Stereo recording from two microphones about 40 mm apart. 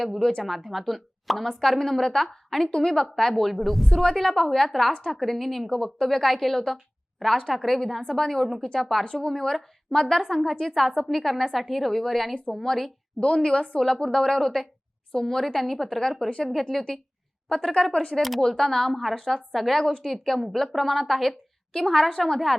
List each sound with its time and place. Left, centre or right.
0.2 s a woman's voice: centre
4.9 s a woman's voice: centre
5.2 s speech: centre
5.6 s a woman's voice: centre
10.6 s a woman's voice: centre
13.1 s a woman's voice: centre
17.9 s a woman's voice: left
18.2 s speech: centre
18.4 s a woman's voice: centre
19.8 s a woman's voice: centre